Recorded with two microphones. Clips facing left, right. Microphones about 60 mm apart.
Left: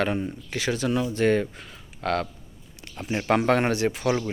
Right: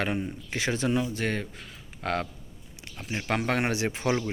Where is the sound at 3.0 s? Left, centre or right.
Centre.